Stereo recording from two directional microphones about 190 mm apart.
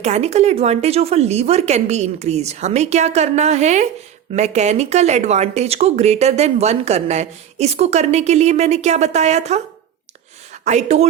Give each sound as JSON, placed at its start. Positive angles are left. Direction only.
{"t": 0.0, "sound": "speech", "side_deg": -35}